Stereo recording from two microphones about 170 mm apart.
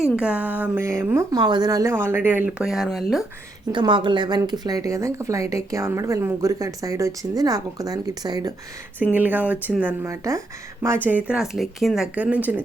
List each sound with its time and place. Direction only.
0.0 s speech: 5° right (ahead or behind)
3.7 s speech: 25° right (ahead or behind)
9.1 s speech: 10° right (ahead or behind)